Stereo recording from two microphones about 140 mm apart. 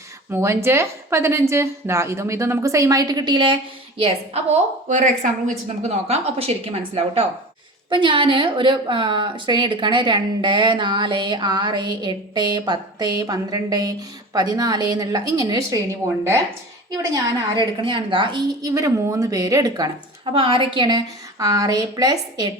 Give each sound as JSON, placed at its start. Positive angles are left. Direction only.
{"t": 0.3, "sound": "speech", "side_deg": -20}
{"t": 3.9, "sound": "a woman's voice", "side_deg": -45}
{"t": 4.9, "sound": "a woman's voice", "side_deg": -65}
{"t": 17.7, "sound": "a woman's voice", "side_deg": -35}
{"t": 18.6, "sound": "speech", "side_deg": -25}